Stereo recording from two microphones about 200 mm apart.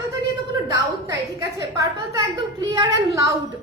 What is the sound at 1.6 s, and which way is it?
A woman's voice, 15° right (ahead or behind).